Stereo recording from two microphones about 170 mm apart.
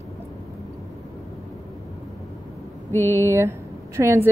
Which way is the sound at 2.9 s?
15° left (ahead or behind).